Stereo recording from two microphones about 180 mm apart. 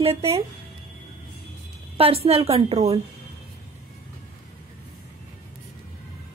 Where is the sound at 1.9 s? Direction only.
35° right (ahead or behind).